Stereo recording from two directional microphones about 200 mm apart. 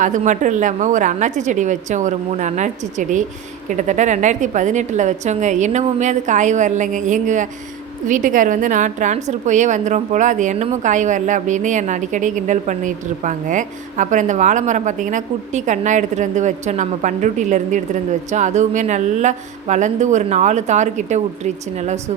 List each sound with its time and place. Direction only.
0.0 s a woman's voice: 40° right (ahead or behind)